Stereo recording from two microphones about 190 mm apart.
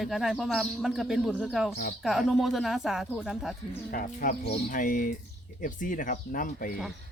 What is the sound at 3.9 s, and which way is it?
Speech, 45° left (ahead or behind).